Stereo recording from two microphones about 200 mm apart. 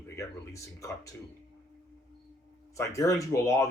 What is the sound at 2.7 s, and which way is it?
Speech, 15° left (ahead or behind).